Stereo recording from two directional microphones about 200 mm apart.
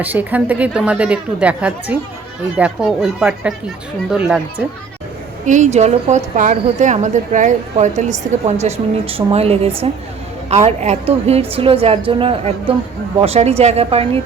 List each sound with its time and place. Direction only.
0.0 s a woman's voice: 10° right (ahead or behind)
5.5 s a woman's voice: 35° right (ahead or behind)